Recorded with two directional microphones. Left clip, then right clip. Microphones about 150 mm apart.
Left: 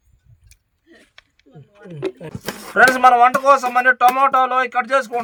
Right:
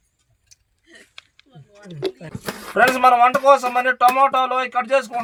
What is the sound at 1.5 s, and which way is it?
Wild animals, 60° left (ahead or behind).